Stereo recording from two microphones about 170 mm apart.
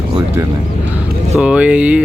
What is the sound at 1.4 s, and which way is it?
Speech, 5° right (ahead or behind).